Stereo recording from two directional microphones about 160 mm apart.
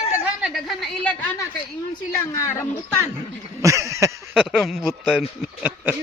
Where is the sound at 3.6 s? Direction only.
20° right (ahead or behind).